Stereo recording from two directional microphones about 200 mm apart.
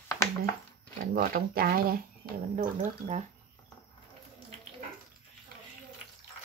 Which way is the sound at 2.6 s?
35° right (ahead or behind).